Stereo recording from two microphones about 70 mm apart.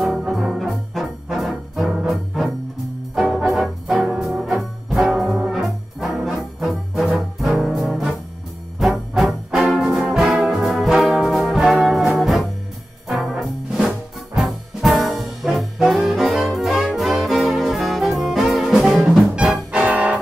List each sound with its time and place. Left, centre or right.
0.3 s brass instrument: centre
2.0 s music: centre
3.4 s brass instrument: centre
7.6 s music: centre
8.7 s brass instrument: centre
12.2 s music: centre
19.7 s brass instrument: centre